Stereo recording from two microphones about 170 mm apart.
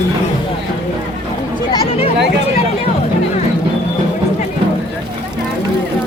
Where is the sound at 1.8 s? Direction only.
35° left (ahead or behind).